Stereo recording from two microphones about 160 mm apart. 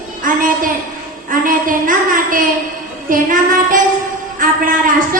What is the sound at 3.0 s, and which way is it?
Child singing, 55° right (ahead or behind).